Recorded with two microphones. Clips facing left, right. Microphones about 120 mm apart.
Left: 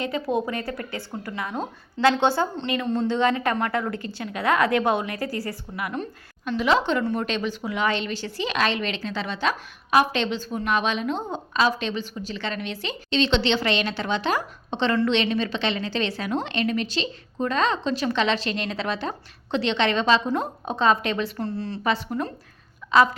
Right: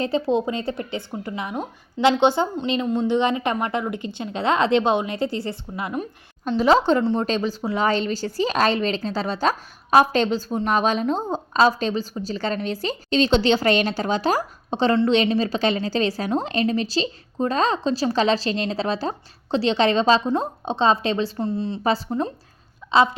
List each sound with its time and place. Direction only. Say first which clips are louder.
0.0 s a woman's voice: right 4 dB; 30° right (ahead or behind)
21.4 s a woman's voice: right 4 dB; 20° right (ahead or behind)
21.8 s a woman's voice: right 2 dB; 35° right (ahead or behind)